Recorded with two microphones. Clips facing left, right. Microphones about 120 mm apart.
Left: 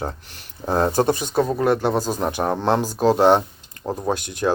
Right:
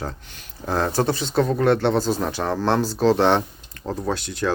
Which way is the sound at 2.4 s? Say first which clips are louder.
Left 3 dB; 20° left (ahead or behind).